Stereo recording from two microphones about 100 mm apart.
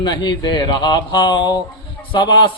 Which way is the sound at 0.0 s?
45° left (ahead or behind).